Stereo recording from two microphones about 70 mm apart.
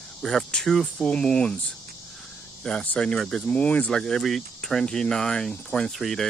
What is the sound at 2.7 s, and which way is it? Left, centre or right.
Speech, centre.